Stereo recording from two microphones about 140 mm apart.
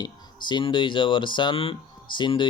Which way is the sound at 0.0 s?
35° left (ahead or behind).